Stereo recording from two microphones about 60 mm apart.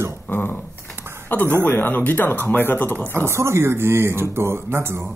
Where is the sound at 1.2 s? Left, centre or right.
Left.